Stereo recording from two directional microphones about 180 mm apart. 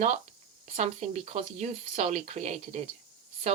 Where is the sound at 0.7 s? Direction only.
35° right (ahead or behind).